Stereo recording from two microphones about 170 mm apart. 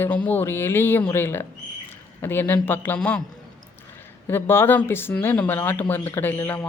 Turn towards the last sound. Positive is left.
turn(degrees=10)  # may be behind; listen again after turning